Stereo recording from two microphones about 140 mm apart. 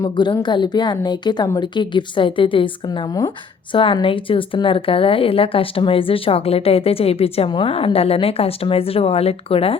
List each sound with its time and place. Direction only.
0.0 s a woman's voice: 30° left (ahead or behind)